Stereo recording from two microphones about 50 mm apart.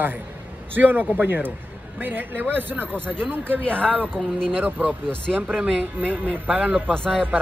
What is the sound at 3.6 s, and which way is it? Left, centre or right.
Speech, left.